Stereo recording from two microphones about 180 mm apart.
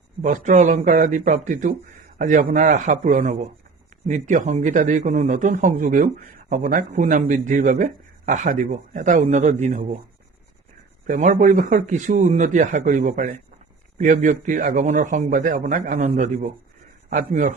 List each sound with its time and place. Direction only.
0.2 s a man's voice: 45° right (ahead or behind)
11.0 s a man's voice: 45° right (ahead or behind)